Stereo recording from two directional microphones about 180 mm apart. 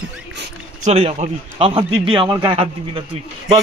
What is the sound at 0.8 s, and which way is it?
A man's voice, 40° right (ahead or behind).